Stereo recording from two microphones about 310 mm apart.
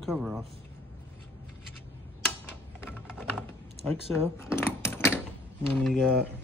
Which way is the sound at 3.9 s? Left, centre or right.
Centre.